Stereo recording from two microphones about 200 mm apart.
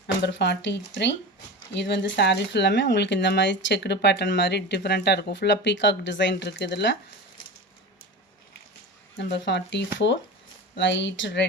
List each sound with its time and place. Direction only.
0.2 s speech: 60° left (ahead or behind)
9.1 s speech: 60° left (ahead or behind)